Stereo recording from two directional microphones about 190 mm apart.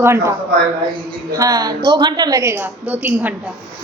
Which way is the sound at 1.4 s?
20° right (ahead or behind).